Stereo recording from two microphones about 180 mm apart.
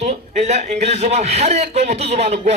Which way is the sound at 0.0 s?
40° right (ahead or behind).